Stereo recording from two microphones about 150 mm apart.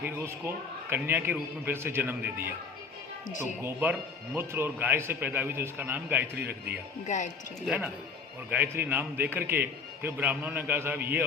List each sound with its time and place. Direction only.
0.0 s a man's voice: 15° right (ahead or behind)
3.2 s speech: 55° left (ahead or behind)
3.6 s a man's voice: 10° right (ahead or behind)
7.1 s speech: 55° left (ahead or behind)
7.6 s a man's voice: 5° right (ahead or behind)